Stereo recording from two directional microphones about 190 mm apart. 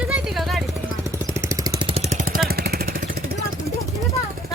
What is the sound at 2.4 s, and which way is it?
Jackhammer, 55° right (ahead or behind).